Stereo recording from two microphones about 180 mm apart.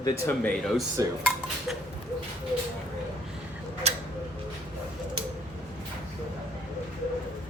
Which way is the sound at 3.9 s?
40° right (ahead or behind).